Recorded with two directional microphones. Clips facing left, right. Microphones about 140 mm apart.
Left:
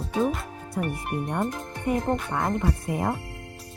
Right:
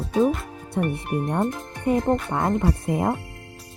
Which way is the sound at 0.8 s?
25° right (ahead or behind).